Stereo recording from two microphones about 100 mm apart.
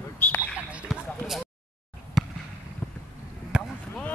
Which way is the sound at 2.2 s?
5° right (ahead or behind).